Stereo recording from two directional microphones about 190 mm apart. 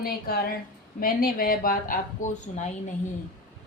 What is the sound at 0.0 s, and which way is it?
A woman's voice, 55° left (ahead or behind).